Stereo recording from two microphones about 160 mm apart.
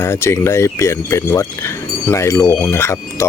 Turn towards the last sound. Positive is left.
turn(degrees=15)  # may be behind; listen again after turning